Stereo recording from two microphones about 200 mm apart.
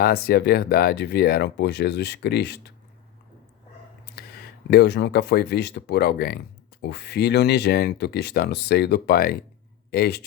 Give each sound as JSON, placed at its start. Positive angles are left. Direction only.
{"t": 0.0, "sound": "speech", "side_deg": 50}
{"t": 4.0, "sound": "speech", "side_deg": 50}